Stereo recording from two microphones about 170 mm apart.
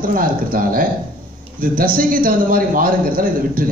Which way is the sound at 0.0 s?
55° right (ahead or behind).